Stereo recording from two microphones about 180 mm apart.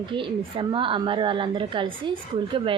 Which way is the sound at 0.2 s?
25° right (ahead or behind).